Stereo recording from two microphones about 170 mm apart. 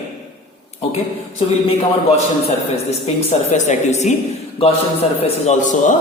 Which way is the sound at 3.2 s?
40° left (ahead or behind).